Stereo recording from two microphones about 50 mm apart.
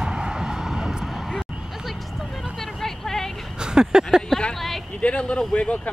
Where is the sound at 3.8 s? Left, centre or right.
Centre.